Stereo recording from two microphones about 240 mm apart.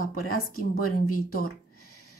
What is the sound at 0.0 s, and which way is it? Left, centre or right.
Speech, left.